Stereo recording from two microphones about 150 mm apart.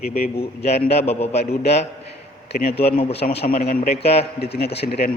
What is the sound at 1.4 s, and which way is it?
A man's voice, 90° left.